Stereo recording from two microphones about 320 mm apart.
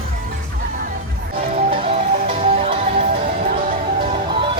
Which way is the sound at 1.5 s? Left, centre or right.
Centre.